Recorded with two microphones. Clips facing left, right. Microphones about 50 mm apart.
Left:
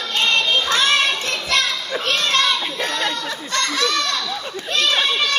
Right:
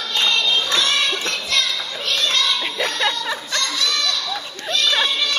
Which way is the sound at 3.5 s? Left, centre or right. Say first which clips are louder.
Left 5 dB; left.